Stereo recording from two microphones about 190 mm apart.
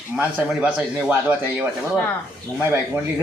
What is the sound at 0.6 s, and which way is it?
Speech, 10° right (ahead or behind).